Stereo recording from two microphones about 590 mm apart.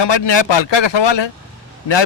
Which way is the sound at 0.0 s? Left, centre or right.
Left.